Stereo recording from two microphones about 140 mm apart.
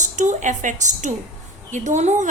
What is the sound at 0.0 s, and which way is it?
A woman's voice, 60° right (ahead or behind).